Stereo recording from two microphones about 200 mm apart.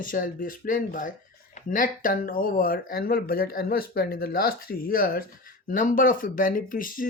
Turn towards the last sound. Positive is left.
turn(degrees=45)  # may be behind; listen again after turning